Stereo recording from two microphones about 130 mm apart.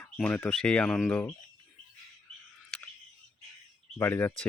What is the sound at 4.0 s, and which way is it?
Speech, 15° left (ahead or behind).